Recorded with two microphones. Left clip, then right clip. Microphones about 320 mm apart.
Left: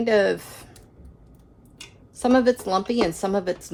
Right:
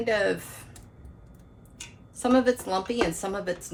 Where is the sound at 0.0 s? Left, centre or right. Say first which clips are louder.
Left 5 dB; left.